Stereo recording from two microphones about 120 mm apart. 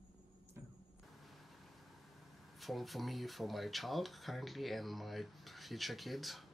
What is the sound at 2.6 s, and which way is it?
Speech, centre (ahead or behind).